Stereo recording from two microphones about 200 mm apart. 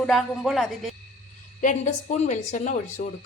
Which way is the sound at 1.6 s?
35° left (ahead or behind).